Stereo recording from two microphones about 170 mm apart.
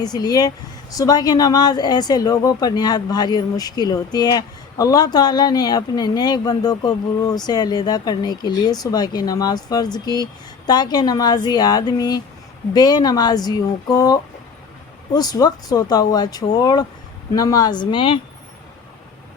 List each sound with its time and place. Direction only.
0.0 s speech: 25° left (ahead or behind)